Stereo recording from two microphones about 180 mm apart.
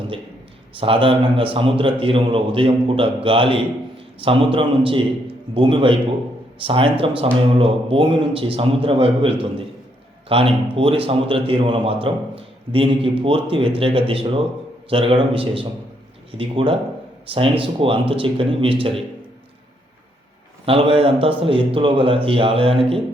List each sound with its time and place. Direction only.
0.8 s a man's voice: 30° right (ahead or behind)
20.7 s a man's voice: 30° right (ahead or behind)